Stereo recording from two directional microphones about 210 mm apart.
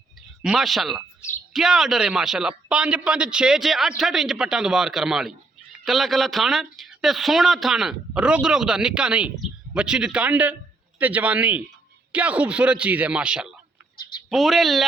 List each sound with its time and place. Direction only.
0.4 s a man's voice: centre (ahead or behind)
13.9 s a sound: 20° left (ahead or behind)
14.3 s speech: centre (ahead or behind)